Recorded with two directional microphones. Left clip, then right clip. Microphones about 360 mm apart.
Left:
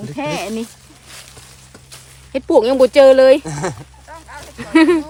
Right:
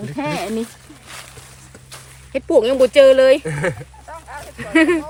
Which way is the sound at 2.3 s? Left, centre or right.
Left.